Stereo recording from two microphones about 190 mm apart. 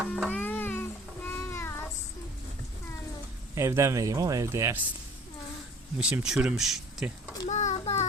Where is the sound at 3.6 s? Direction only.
15° right (ahead or behind).